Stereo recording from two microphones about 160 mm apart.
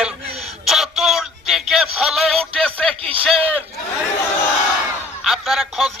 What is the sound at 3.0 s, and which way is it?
Speech, 35° right (ahead or behind).